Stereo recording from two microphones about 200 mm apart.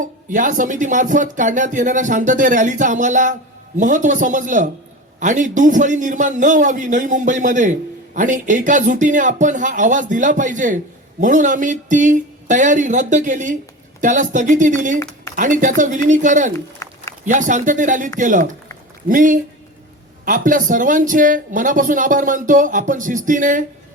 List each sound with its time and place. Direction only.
0.0 s a man's voice: 40° right (ahead or behind)
16.8 s a sound: 15° left (ahead or behind)
17.2 s a man's voice: 40° right (ahead or behind)